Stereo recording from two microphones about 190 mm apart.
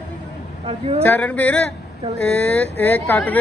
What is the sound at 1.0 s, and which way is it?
Speech, 10° left (ahead or behind).